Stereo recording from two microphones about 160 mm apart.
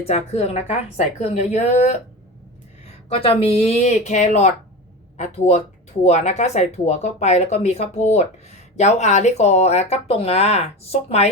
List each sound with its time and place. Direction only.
0.0 s speech: 40° left (ahead or behind)